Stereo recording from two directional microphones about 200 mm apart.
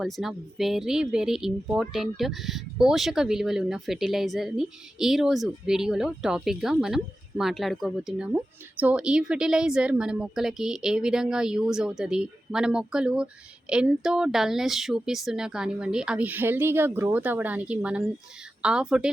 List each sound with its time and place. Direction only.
0.0 s speech: centre (ahead or behind)